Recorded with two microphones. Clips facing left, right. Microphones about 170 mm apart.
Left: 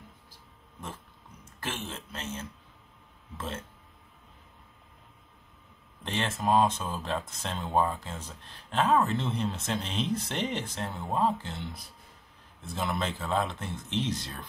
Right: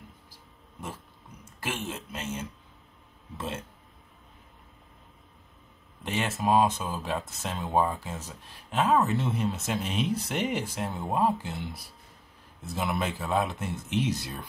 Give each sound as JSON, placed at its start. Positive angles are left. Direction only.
{"t": 1.6, "sound": "speech", "side_deg": -10}
{"t": 6.0, "sound": "speech", "side_deg": -5}
{"t": 12.6, "sound": "speech", "side_deg": -5}